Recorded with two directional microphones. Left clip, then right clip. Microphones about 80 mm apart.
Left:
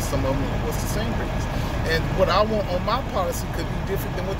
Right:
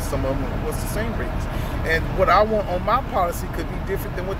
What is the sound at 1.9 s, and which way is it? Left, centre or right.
Speech, centre.